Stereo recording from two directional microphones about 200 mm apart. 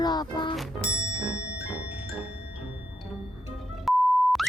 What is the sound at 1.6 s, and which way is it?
Music, 5° right (ahead or behind).